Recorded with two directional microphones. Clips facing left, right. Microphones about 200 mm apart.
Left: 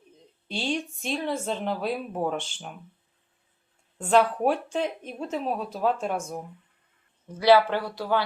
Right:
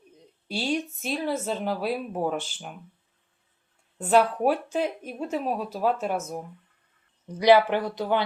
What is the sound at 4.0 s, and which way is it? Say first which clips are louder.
Speech: even; 5° right (ahead or behind).